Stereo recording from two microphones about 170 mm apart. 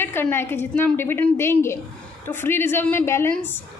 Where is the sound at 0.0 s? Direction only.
10° left (ahead or behind).